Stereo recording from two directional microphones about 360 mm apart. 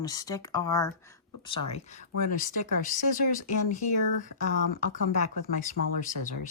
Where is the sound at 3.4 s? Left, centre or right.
Left.